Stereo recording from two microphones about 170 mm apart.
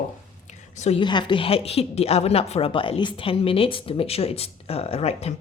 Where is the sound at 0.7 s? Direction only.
40° left (ahead or behind).